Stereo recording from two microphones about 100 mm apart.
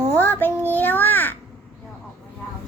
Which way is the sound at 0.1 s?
20° left (ahead or behind).